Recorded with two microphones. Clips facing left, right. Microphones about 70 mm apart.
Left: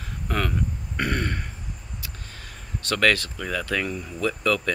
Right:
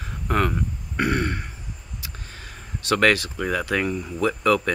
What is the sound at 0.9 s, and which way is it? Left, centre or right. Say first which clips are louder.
Speech: right 4 dB; centre.